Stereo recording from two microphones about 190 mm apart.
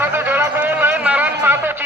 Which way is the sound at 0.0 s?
10° right (ahead or behind).